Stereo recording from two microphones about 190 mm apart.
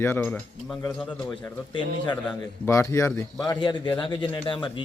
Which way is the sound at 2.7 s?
15° left (ahead or behind).